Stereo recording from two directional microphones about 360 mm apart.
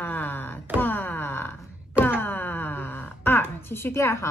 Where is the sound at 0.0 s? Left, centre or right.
Centre.